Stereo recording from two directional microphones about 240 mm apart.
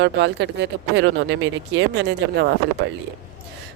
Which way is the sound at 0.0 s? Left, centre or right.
Right.